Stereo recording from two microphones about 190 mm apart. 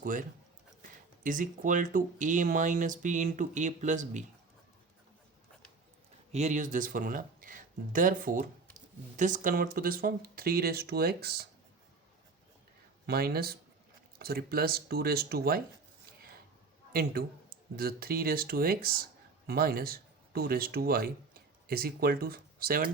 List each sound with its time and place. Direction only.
0.0 s speech: 45° right (ahead or behind)
6.3 s speech: 40° right (ahead or behind); by 11.4 s 55° right (ahead or behind)
13.1 s speech: 55° right (ahead or behind)
16.9 s speech: 50° right (ahead or behind)